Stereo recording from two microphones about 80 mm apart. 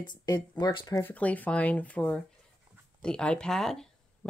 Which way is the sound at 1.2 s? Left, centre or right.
Centre.